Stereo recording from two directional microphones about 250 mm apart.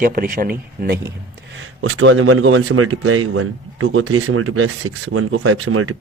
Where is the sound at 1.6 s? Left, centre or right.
Right.